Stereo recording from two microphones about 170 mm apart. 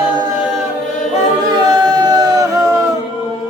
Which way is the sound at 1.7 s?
25° right (ahead or behind).